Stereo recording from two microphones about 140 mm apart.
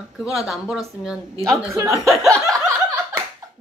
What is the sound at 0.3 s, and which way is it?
Speech, centre (ahead or behind).